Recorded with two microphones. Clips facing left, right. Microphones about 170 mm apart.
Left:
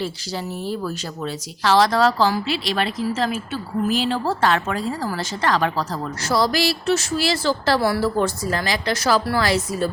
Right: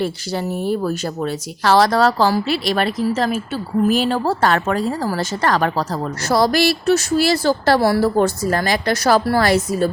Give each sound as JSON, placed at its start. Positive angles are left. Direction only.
{"t": 0.0, "sound": "speech", "side_deg": -55}
{"t": 3.8, "sound": "speech", "side_deg": -50}